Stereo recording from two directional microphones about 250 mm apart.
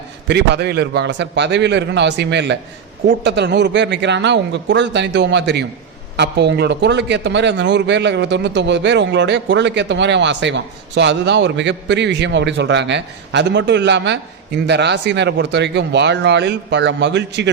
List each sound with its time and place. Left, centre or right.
0.3 s a man's voice: right